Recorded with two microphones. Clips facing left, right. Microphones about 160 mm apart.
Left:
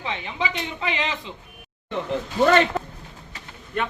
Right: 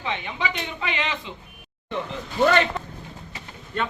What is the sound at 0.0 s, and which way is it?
A man's voice, 30° left (ahead or behind).